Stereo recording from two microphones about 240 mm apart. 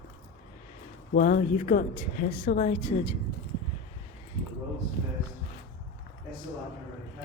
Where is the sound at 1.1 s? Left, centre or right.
Left.